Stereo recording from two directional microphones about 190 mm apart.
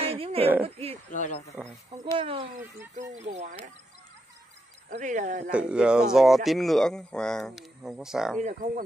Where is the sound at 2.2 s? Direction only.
30° right (ahead or behind).